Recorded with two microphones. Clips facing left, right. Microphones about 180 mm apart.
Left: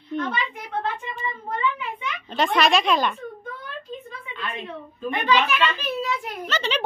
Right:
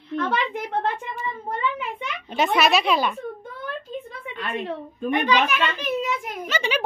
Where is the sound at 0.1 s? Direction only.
60° right (ahead or behind).